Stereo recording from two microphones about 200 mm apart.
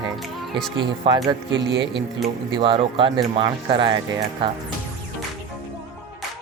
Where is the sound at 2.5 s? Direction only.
25° right (ahead or behind).